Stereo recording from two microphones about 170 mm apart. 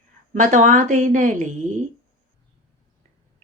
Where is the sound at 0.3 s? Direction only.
50° right (ahead or behind).